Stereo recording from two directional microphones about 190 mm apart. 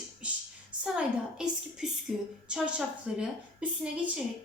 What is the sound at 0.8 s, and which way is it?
A woman's voice, 5° right (ahead or behind).